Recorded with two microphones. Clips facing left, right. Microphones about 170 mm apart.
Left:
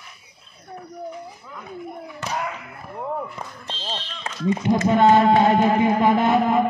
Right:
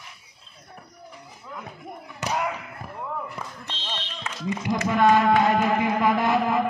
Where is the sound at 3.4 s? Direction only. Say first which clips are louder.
Left 2 dB; 35° left (ahead or behind).